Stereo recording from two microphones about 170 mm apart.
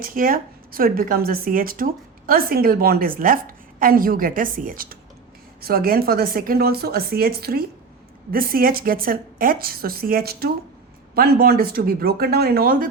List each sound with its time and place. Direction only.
0.0 s a woman's voice: 55° right (ahead or behind)